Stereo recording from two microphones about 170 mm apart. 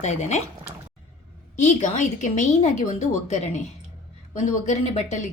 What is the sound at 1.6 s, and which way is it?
A woman's voice, 45° left (ahead or behind).